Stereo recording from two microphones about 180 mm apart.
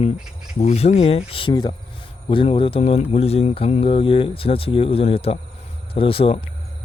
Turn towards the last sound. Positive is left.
turn(degrees=30)  # may be behind; listen again after turning